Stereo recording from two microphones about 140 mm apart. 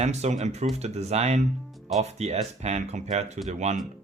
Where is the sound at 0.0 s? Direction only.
55° right (ahead or behind).